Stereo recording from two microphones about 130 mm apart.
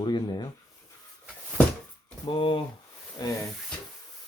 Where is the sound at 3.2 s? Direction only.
30° left (ahead or behind).